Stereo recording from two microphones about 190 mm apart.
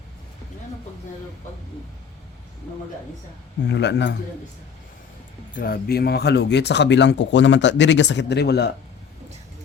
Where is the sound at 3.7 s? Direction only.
65° left (ahead or behind).